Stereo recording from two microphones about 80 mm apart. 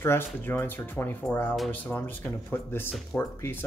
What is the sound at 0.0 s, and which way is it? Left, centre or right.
Speech, left.